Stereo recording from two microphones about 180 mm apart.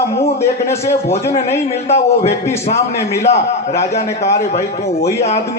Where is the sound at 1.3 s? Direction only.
40° left (ahead or behind).